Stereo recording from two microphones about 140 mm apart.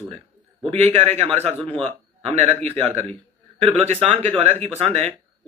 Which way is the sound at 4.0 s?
45° right (ahead or behind).